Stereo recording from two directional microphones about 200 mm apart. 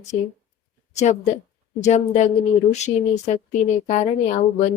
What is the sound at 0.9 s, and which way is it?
Speech, 35° left (ahead or behind).